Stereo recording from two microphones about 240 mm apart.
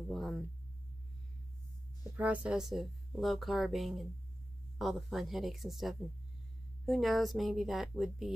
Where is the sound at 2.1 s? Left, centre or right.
Centre.